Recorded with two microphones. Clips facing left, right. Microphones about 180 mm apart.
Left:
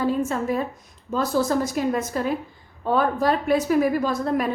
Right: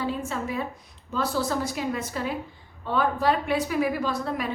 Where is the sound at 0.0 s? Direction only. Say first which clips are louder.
Left 6 dB; 45° left (ahead or behind).